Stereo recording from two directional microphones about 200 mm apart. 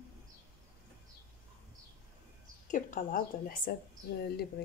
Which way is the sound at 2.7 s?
40° left (ahead or behind).